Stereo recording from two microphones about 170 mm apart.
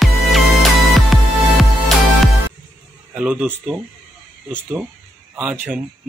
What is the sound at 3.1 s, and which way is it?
Speech, 5° right (ahead or behind).